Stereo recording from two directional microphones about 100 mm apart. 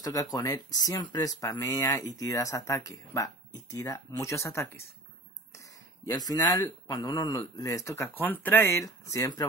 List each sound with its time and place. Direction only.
0.0 s speech: 35° left (ahead or behind)
5.5 s a sound: 30° left (ahead or behind)
6.9 s speech: 40° left (ahead or behind)